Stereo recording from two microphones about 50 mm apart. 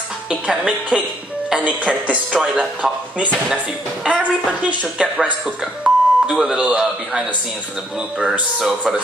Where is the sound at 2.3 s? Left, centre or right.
Centre.